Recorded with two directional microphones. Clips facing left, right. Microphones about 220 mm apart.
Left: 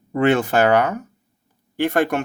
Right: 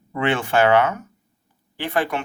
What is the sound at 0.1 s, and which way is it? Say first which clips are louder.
Speech: left 4 dB; 40° left (ahead or behind).